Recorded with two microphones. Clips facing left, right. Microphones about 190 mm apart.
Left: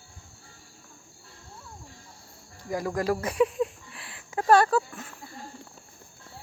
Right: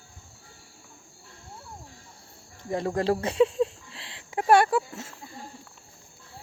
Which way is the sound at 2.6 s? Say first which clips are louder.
Right 2 dB; 25° right (ahead or behind).